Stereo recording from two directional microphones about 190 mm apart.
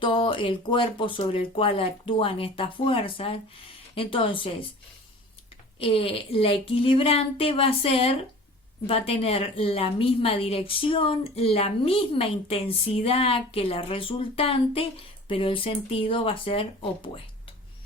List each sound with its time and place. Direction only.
0.0 s a woman's voice: 25° left (ahead or behind)
5.8 s a woman's voice: 30° left (ahead or behind)